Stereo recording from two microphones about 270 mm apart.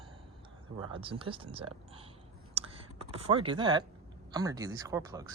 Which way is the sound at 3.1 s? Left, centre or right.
Centre.